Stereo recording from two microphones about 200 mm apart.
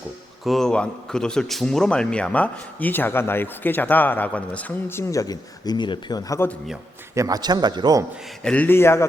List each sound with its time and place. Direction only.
0.4 s a man's voice: centre (ahead or behind)
7.2 s a man's voice: 20° right (ahead or behind)
8.4 s a man's voice: 10° left (ahead or behind)